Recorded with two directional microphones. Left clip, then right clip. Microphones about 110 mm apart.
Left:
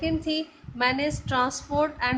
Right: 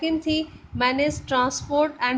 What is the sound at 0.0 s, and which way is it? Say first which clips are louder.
A woman's voice: right 3 dB; 30° right (ahead or behind).